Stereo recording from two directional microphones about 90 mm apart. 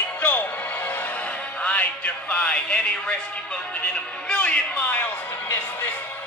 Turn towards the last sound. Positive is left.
turn(degrees=20)  # may be behind; listen again after turning